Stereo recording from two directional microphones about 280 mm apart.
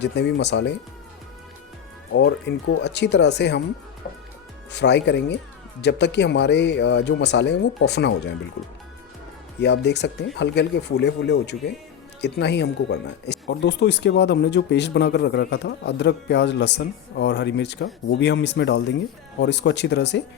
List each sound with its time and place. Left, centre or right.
0.0 s speech: left
2.1 s speech: left
4.7 s speech: left
9.6 s speech: left